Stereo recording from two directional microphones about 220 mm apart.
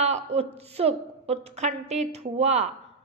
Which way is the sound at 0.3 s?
30° right (ahead or behind).